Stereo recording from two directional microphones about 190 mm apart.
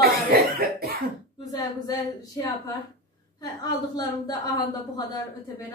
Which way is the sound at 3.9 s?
20° left (ahead or behind).